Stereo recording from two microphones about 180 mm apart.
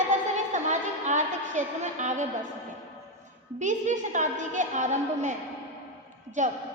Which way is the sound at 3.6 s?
45° right (ahead or behind).